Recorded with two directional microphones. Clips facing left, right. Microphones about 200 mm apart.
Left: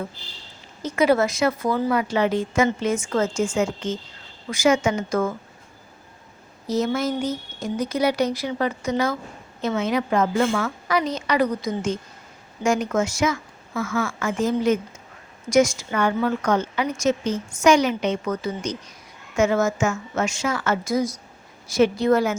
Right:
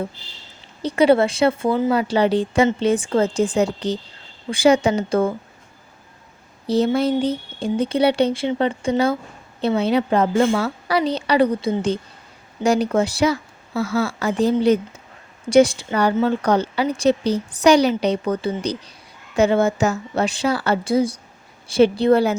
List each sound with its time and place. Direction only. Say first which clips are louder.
0.8 s a woman's voice: right 4 dB; 30° right (ahead or behind)
6.7 s a woman's voice: right 5 dB; 30° right (ahead or behind)